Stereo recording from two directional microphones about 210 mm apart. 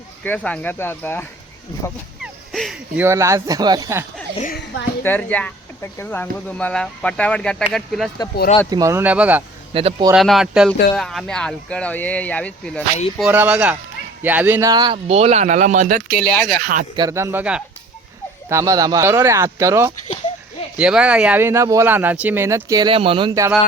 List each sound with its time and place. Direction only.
0.3 s speech: 5° left (ahead or behind)
2.2 s speech: centre (ahead or behind); by 4.0 s 15° right (ahead or behind)
4.4 s a woman's voice: 40° left (ahead or behind)
5.0 s speech: 10° left (ahead or behind)
8.7 s speech: 15° right (ahead or behind)
9.7 s speech: 25° right (ahead or behind)
10.1 s speech: centre (ahead or behind)
13.1 s speech: 5° right (ahead or behind)
14.9 s speech: 30° right (ahead or behind)
16.1 s speech: 5° left (ahead or behind)
16.5 s speech: 45° right (ahead or behind)
16.9 s speech: 15° right (ahead or behind)